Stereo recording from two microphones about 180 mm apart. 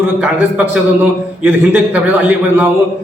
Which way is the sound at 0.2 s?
10° right (ahead or behind).